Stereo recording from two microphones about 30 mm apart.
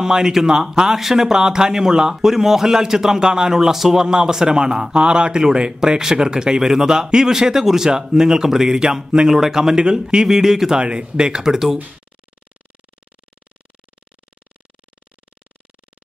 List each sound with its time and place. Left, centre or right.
0.0 s a man's voice: right
3.5 s speech: centre
4.0 s a man's voice: right
10.8 s speech: right
11.4 s speech: centre